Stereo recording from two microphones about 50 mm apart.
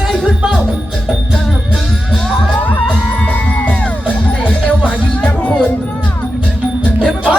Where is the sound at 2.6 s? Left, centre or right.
Left.